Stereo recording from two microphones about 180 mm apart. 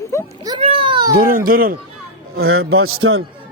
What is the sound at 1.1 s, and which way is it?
Speech, 50° right (ahead or behind).